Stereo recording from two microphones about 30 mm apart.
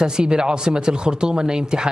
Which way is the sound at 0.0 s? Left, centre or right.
Right.